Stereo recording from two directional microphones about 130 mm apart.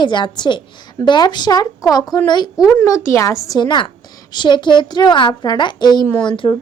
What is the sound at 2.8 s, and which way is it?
A woman's voice, 20° left (ahead or behind).